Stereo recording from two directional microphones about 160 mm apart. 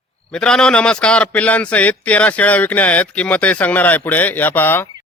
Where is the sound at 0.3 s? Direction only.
5° left (ahead or behind).